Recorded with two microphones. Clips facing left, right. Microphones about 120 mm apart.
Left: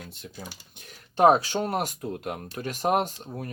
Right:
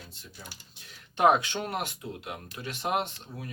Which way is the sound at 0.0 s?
60° left (ahead or behind).